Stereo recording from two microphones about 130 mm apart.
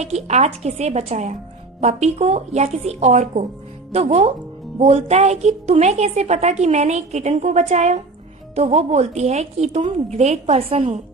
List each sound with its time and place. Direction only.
0.0 s a woman's voice: 55° right (ahead or behind)